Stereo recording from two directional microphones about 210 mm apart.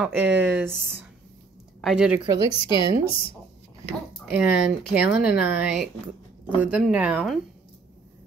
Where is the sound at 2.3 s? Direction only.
25° left (ahead or behind).